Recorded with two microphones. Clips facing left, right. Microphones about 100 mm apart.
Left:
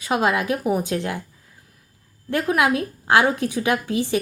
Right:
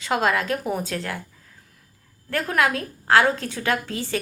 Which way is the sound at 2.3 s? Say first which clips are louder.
Left 3 dB; 15° left (ahead or behind).